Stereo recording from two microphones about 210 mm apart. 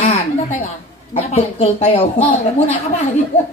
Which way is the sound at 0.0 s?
35° left (ahead or behind).